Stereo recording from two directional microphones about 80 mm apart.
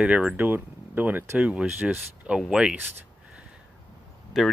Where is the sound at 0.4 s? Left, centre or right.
Right.